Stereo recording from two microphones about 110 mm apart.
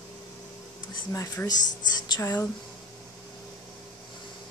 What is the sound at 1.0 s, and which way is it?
Speech, 30° left (ahead or behind).